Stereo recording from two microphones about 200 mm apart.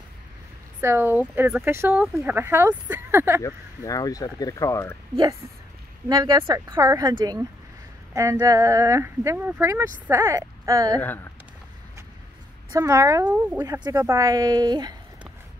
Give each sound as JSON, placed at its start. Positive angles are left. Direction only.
{"t": 0.7, "sound": "speech", "side_deg": -10}
{"t": 3.4, "sound": "speech", "side_deg": 15}
{"t": 6.0, "sound": "a woman's voice", "side_deg": -20}
{"t": 12.7, "sound": "a woman's voice", "side_deg": -15}